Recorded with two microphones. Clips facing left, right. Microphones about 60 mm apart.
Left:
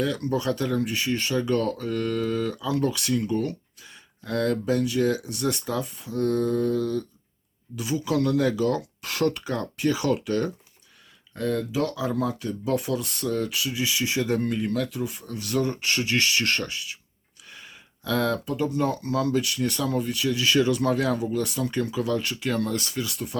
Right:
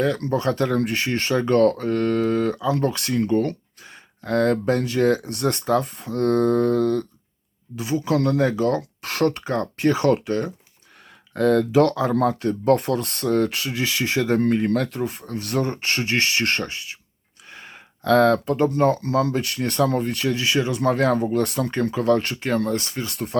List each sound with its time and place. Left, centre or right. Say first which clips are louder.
0.0 s speech: right 4 dB; right
7.8 s speech: right 3 dB; right
10.2 s speech: right 1 dB; right
11.3 s speech: right 9 dB; right
17.5 s gasp: right 4 dB; right
18.0 s speech: right 9 dB; right
20.4 s speech: left 1 dB; right
20.9 s speech: right 5 dB; right
23.1 s speech: right 7 dB; right